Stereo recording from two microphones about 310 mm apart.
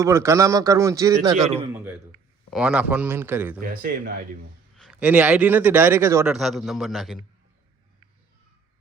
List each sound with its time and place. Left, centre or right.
0.0 s a man's voice: centre
3.6 s speech: right
4.8 s a man's voice: centre